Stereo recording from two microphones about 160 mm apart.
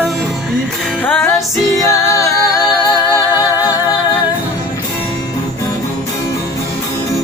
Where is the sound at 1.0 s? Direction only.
10° left (ahead or behind).